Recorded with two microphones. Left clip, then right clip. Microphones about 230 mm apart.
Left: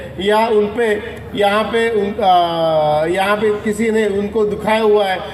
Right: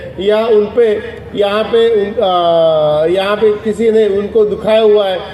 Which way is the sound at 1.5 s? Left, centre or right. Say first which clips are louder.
Right 4 dB; left.